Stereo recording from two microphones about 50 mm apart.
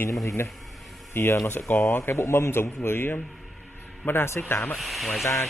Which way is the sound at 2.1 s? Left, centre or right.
Left.